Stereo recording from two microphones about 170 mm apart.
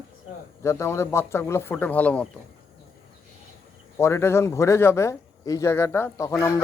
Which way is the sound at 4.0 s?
15° left (ahead or behind).